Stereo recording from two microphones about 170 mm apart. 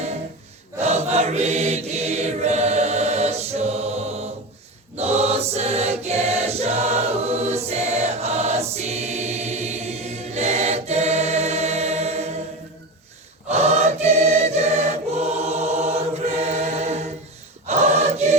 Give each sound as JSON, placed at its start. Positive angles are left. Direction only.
{"t": 0.8, "sound": "choir", "side_deg": -40}
{"t": 4.9, "sound": "mantra", "side_deg": -40}
{"t": 13.5, "sound": "choir", "side_deg": -40}